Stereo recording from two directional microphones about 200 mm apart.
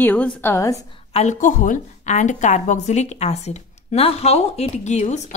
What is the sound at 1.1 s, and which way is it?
A woman's voice, 40° left (ahead or behind).